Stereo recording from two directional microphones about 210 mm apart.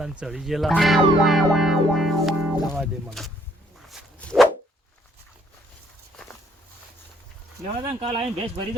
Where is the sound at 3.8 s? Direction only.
Centre (ahead or behind).